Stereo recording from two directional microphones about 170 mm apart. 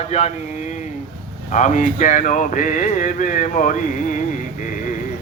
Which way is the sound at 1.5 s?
45° left (ahead or behind).